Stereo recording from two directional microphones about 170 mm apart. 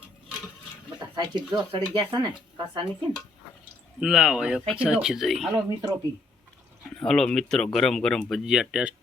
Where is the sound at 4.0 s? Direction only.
5° right (ahead or behind).